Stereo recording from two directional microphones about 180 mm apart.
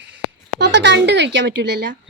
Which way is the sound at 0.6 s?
75° right (ahead or behind).